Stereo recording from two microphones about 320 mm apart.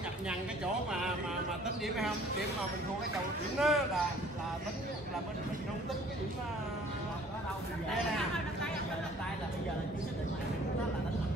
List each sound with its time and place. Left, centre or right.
3.5 s speech: centre